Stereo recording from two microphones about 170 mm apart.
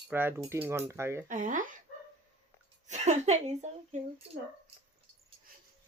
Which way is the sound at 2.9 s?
40° right (ahead or behind).